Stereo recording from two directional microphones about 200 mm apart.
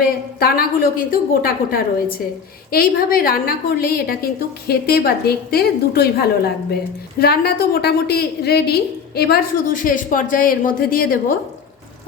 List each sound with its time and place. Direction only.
0.0 s a woman's voice: 50° left (ahead or behind)